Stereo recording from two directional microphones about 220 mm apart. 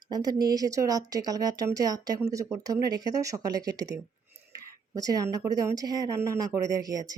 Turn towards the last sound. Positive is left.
turn(degrees=-15)  # may be behind; listen again after turning